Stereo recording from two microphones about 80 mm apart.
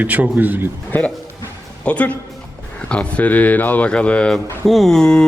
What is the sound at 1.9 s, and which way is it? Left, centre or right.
A man's voice, centre.